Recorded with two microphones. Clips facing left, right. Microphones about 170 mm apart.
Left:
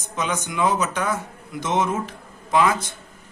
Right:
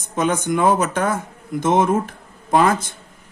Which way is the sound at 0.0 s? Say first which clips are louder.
Right 6 dB; 50° right (ahead or behind).